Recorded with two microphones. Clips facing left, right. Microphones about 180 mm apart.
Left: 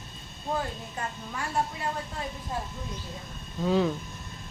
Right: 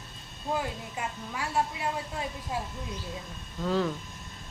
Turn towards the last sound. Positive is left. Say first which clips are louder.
# left 3 dB
turn(degrees=15)  # may be behind; listen again after turning